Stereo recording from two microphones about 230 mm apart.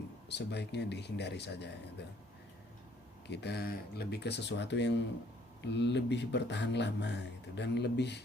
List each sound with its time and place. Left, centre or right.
0.3 s speech: left
3.2 s speech: left